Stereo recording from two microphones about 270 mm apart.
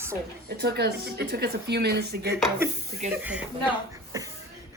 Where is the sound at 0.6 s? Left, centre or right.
Right.